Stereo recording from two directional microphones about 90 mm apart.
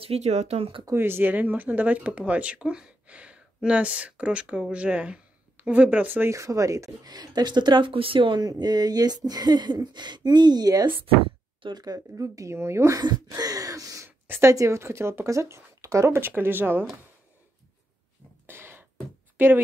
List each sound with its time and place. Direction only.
0.1 s speech: 90° right
0.6 s speech: 80° right
0.9 s speech: 25° right (ahead or behind)
6.3 s speech: 35° right (ahead or behind)
7.2 s speech: 50° right (ahead or behind)
8.5 s speech: 50° right (ahead or behind); by 13.0 s 30° right (ahead or behind)
13.3 s gasp: 40° right (ahead or behind)
14.2 s a woman's voice: 25° right (ahead or behind)
14.5 s speech: 35° right (ahead or behind)
18.5 s music: 25° right (ahead or behind)
19.3 s speech: 20° right (ahead or behind)